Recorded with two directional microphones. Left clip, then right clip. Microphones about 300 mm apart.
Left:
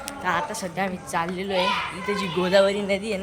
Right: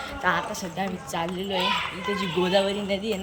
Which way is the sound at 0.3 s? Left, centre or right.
Centre.